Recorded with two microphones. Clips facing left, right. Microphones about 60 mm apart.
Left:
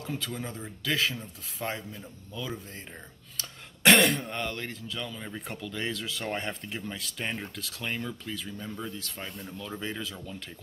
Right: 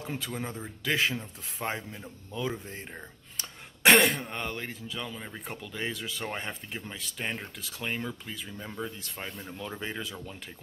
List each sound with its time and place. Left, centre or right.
0.1 s speech: right
3.8 s speech: centre